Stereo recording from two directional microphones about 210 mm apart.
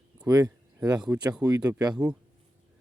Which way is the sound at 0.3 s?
15° right (ahead or behind).